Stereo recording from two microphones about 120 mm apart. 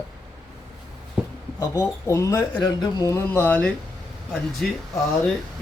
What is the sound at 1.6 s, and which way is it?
Speech, 30° left (ahead or behind).